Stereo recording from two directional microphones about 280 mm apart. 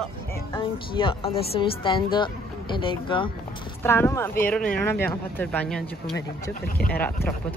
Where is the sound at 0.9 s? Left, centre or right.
Centre.